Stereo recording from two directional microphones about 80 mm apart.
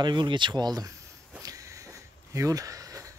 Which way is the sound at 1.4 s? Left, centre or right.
Right.